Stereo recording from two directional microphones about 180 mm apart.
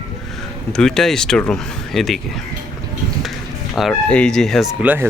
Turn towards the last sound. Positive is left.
turn(degrees=-10)  # may be behind; listen again after turning